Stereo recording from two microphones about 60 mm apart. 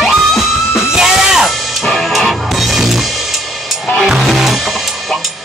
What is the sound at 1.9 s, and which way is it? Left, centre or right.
Music, centre.